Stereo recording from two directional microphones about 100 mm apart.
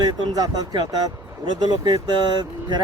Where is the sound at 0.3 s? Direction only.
40° right (ahead or behind).